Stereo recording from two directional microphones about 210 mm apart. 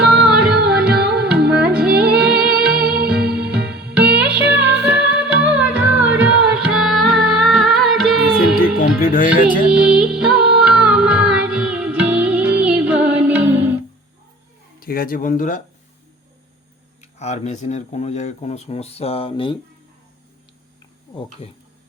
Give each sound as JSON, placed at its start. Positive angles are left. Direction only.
{"t": 0.0, "sound": "music", "side_deg": -5}
{"t": 9.0, "sound": "speech", "side_deg": 40}
{"t": 9.7, "sound": "music", "side_deg": -5}
{"t": 14.8, "sound": "speech", "side_deg": 45}
{"t": 17.0, "sound": "speech", "side_deg": 30}
{"t": 21.4, "sound": "speech", "side_deg": 25}